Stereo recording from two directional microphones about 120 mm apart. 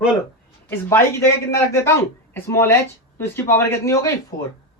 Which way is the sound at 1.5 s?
20° left (ahead or behind).